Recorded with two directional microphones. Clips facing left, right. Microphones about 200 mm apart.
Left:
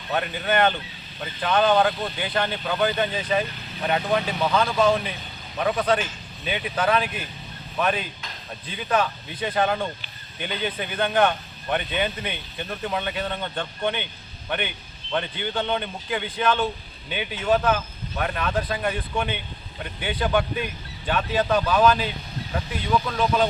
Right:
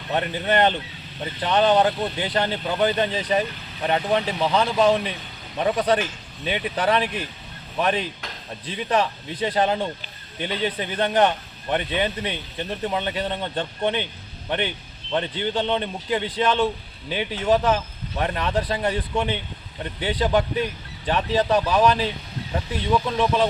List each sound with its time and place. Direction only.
0.1 s a man's voice: 30° right (ahead or behind)
15.1 s speech: 30° right (ahead or behind)